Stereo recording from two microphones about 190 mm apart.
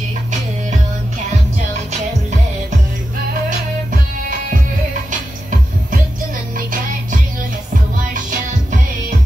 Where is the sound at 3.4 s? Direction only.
50° right (ahead or behind).